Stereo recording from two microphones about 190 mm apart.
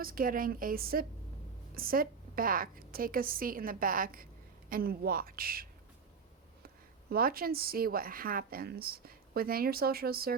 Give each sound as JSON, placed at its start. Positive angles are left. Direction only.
{"t": 0.0, "sound": "a woman's voice", "side_deg": -50}
{"t": 7.1, "sound": "a woman's voice", "side_deg": -50}